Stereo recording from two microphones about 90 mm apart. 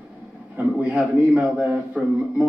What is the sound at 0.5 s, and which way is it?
A man's voice, 15° right (ahead or behind).